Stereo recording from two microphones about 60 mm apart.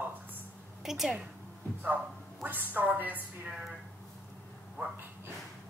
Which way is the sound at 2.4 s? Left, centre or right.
Right.